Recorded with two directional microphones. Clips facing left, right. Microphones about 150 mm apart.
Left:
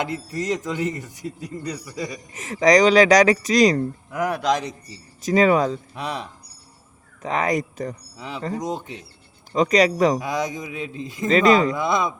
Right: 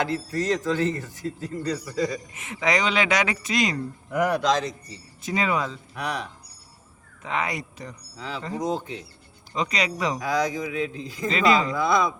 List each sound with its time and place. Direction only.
0.0 s speech: 15° left (ahead or behind)
2.3 s speech: 40° left (ahead or behind)
4.1 s speech: 5° left (ahead or behind)
5.2 s speech: 40° left (ahead or behind)
5.9 s a man's voice: 25° left (ahead or behind)
7.2 s speech: 40° left (ahead or behind)
9.6 s speech: 45° left (ahead or behind)
10.2 s a man's voice: 20° left (ahead or behind)
11.3 s speech: 45° left (ahead or behind)
11.7 s a man's voice: 20° left (ahead or behind)